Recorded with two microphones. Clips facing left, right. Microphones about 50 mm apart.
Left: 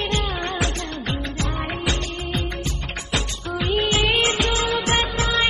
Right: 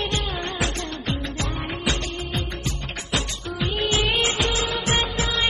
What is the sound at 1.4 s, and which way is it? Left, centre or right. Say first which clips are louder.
Music: left 2 dB; left.